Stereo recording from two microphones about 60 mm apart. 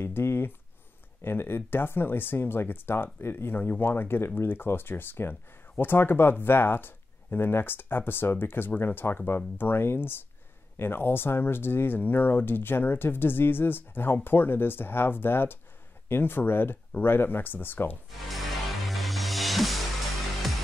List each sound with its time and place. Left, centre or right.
0.0 s speech: left
18.3 s music: centre